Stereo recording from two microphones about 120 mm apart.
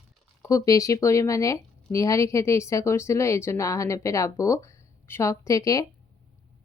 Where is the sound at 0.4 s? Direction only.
30° left (ahead or behind).